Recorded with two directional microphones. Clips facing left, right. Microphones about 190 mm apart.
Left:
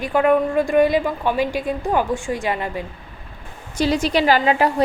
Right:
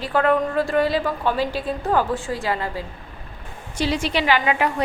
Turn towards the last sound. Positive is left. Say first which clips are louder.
# left 4 dB
turn(degrees=35)  # may be behind; listen again after turning